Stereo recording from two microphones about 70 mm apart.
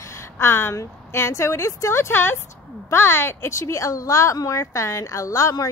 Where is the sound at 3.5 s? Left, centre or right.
Left.